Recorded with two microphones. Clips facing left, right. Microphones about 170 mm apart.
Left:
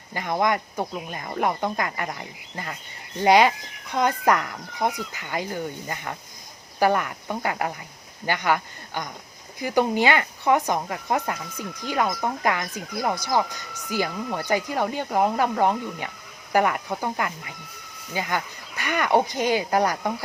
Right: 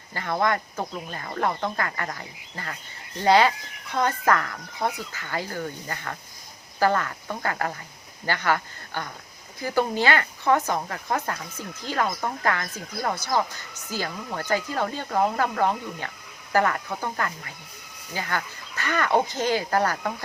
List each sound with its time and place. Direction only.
0.1 s speech: 15° left (ahead or behind)